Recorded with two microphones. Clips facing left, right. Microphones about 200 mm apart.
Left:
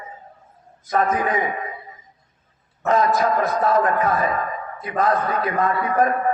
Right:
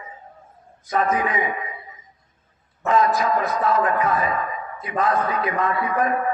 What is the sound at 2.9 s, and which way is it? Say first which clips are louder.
A man's voice: left 1 dB; 40° left (ahead or behind).